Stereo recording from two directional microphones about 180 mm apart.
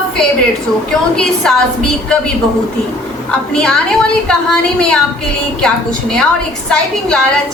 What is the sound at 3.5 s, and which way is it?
A woman's voice, 5° left (ahead or behind).